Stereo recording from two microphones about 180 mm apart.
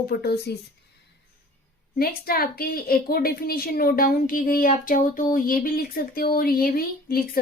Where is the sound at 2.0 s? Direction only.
55° left (ahead or behind).